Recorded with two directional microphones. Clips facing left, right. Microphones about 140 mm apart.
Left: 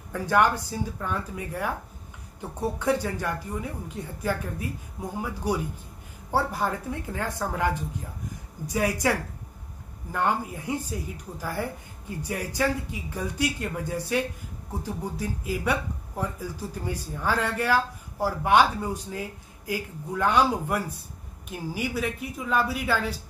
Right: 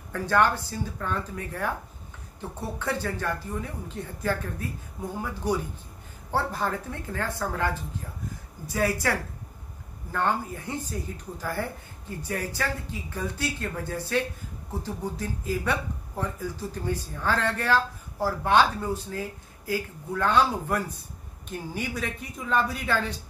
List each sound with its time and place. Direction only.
0.1 s speech: 15° left (ahead or behind)
2.8 s speech: 15° left (ahead or behind)